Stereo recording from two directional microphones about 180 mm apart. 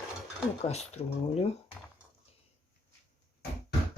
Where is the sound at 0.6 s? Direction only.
35° left (ahead or behind).